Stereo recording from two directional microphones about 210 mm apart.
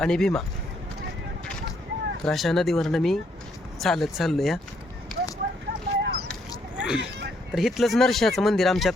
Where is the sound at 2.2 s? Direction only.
Centre (ahead or behind).